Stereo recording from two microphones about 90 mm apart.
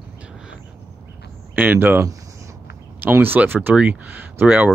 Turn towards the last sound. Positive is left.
turn(degrees=-20)  # may be behind; listen again after turning